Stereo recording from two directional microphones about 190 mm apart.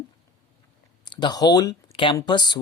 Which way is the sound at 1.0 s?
25° left (ahead or behind).